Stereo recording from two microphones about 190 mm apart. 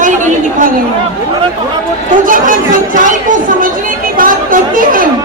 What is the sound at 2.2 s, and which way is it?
Chatter, 45° right (ahead or behind).